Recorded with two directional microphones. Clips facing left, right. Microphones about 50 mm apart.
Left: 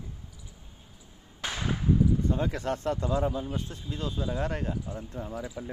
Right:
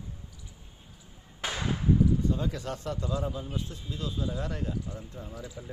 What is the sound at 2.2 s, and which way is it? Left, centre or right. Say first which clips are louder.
Speech: left 2 dB; left.